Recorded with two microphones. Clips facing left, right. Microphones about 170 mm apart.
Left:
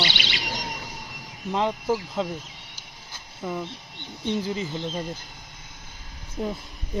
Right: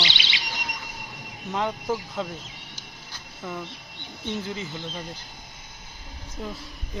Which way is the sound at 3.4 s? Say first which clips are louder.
Left 4 dB; 10° left (ahead or behind).